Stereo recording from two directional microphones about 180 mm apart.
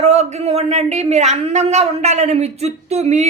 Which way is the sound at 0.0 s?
40° right (ahead or behind).